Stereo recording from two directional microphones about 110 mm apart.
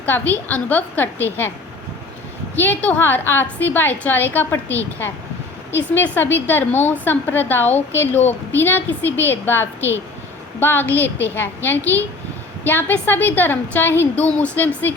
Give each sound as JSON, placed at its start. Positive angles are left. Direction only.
{"t": 0.0, "sound": "a woman's voice", "side_deg": 15}
{"t": 2.6, "sound": "a woman's voice", "side_deg": 15}